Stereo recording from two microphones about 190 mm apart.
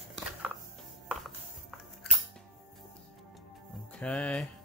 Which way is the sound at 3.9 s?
5° left (ahead or behind).